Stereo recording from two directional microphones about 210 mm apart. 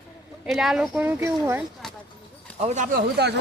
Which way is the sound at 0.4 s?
Centre (ahead or behind).